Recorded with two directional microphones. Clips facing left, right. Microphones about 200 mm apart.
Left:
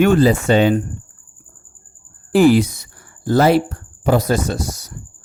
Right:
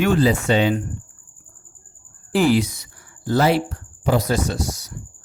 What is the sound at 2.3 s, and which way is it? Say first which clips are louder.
Speech: left 5 dB; 50° left (ahead or behind).